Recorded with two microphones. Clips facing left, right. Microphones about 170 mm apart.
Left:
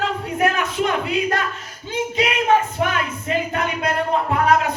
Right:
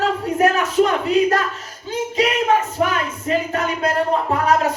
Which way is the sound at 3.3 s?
40° right (ahead or behind).